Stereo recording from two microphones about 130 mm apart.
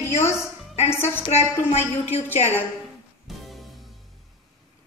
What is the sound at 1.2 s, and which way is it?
A woman's voice, 55° left (ahead or behind).